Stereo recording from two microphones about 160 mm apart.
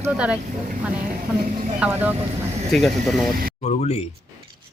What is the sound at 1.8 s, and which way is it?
Speech, 10° right (ahead or behind).